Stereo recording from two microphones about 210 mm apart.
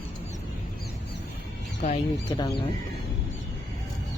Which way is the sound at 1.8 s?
30° left (ahead or behind).